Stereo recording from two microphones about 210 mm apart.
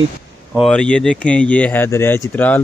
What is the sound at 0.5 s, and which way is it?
Speech, 5° left (ahead or behind).